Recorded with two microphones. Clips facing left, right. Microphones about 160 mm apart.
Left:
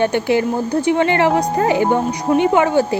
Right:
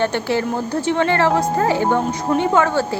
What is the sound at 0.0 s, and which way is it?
A woman's voice, 15° left (ahead or behind).